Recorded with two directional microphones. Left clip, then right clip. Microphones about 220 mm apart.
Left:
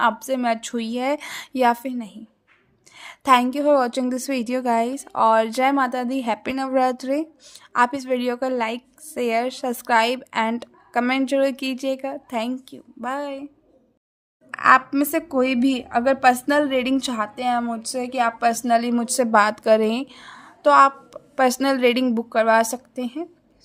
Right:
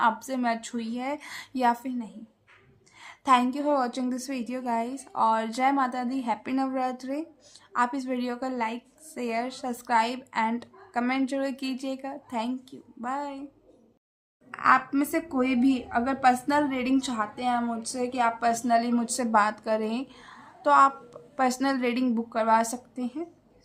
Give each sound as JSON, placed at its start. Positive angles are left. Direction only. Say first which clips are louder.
{"t": 0.0, "sound": "a woman's voice", "louder": "left 5 dB", "side_deg": 35}
{"t": 14.5, "sound": "a woman's voice", "louder": "left 6 dB", "side_deg": 45}